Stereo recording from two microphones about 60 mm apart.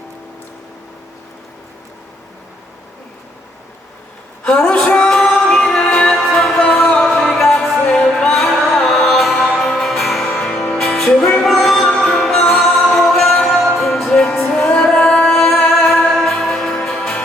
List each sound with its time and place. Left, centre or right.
4.7 s a sound: centre
5.5 s music: centre
16.0 s music: centre